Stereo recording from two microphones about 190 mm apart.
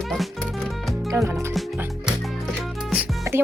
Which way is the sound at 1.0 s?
15° right (ahead or behind).